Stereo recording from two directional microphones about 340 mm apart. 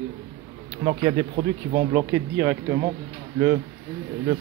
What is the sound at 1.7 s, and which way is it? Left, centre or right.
Speech, centre.